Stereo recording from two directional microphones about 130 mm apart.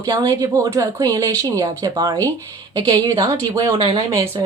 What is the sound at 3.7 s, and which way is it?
Speech, 45° right (ahead or behind).